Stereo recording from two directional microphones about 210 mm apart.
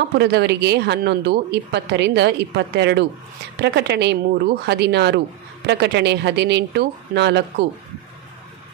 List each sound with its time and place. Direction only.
0.2 s speech: 55° right (ahead or behind)